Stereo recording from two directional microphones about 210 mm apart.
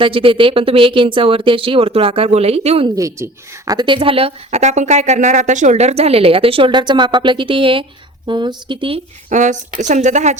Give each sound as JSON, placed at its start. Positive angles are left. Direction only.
{"t": 0.0, "sound": "a woman's voice", "side_deg": -25}
{"t": 2.9, "sound": "a woman's voice", "side_deg": -15}